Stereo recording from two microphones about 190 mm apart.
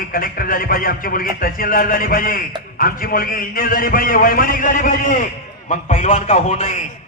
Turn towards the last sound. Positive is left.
turn(degrees=40)  # may be behind; listen again after turning